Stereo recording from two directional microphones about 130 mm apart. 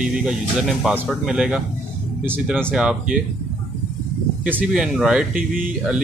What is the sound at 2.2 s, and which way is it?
Speech, 15° right (ahead or behind).